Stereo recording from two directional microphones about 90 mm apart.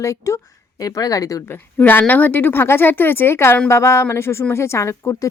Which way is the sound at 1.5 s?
20° left (ahead or behind).